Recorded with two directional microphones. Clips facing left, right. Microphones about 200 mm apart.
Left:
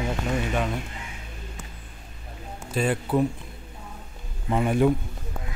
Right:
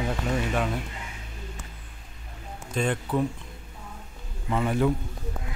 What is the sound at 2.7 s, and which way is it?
Speech, 5° left (ahead or behind).